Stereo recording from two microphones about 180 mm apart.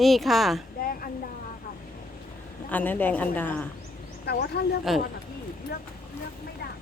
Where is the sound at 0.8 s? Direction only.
55° left (ahead or behind).